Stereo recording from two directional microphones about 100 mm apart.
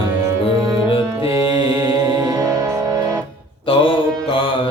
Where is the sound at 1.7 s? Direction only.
40° right (ahead or behind).